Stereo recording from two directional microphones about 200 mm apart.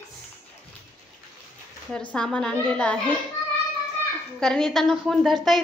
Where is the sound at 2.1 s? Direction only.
5° left (ahead or behind).